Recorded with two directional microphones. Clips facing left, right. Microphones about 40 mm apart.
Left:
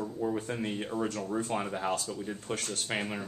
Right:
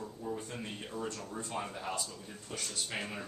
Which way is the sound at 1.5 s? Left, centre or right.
Left.